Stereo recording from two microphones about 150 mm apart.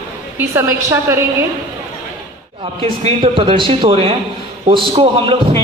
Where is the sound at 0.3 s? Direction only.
20° right (ahead or behind).